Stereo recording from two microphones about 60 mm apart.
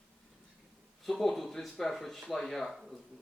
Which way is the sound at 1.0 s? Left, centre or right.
Centre.